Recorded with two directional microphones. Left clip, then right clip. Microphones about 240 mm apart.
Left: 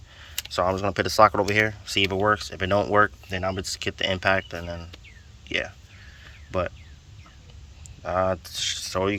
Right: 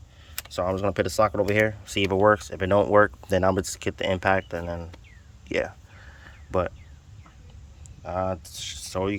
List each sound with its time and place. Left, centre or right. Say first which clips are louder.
0.5 s speech: left 1 dB; centre
3.2 s speech: right 6 dB; right; by 6.7 s centre
8.0 s speech: left 4 dB; centre